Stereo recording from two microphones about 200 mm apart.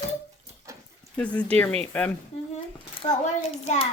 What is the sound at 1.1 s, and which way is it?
Speech, 5° left (ahead or behind).